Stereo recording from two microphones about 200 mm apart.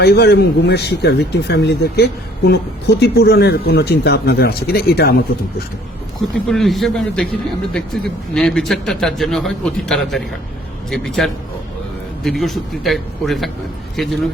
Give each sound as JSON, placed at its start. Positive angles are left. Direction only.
{"t": 0.0, "sound": "speech", "side_deg": 55}
{"t": 6.5, "sound": "a man's voice", "side_deg": 0}